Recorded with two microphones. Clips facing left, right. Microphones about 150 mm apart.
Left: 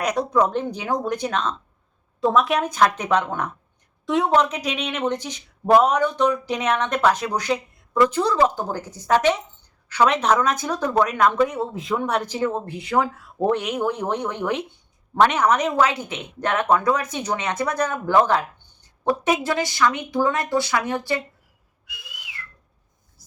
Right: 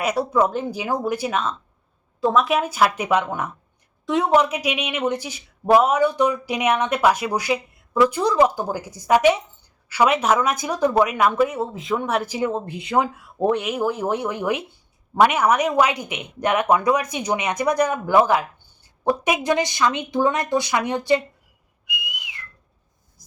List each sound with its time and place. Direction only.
0.0 s a woman's voice: 5° right (ahead or behind)
13.5 s speech: 5° right (ahead or behind); by 21.2 s 20° right (ahead or behind)
21.8 s whistling: 15° right (ahead or behind)